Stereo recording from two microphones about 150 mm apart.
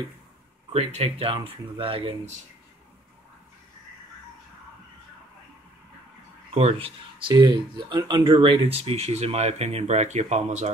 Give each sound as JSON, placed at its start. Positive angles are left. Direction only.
{"t": 0.7, "sound": "speech", "side_deg": -40}
{"t": 6.5, "sound": "speech", "side_deg": -40}